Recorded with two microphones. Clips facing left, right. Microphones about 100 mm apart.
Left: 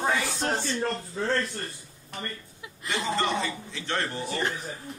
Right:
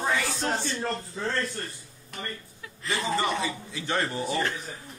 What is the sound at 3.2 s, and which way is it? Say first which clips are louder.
A man's voice: even; 10° right (ahead or behind).